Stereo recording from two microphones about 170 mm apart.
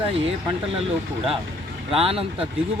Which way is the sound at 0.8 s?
35° right (ahead or behind).